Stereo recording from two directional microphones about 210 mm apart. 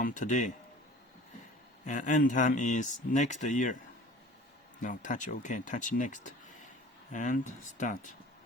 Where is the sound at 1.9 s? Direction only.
40° left (ahead or behind).